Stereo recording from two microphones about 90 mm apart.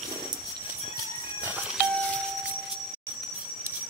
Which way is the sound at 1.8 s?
15° left (ahead or behind).